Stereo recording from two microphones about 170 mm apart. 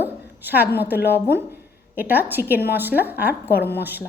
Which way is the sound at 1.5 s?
10° right (ahead or behind).